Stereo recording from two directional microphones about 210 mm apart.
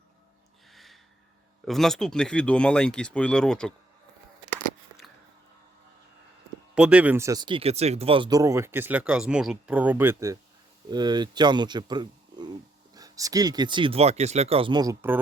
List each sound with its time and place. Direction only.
0.7 s a sound: centre (ahead or behind)
1.6 s speech: centre (ahead or behind)
6.7 s speech: 5° right (ahead or behind)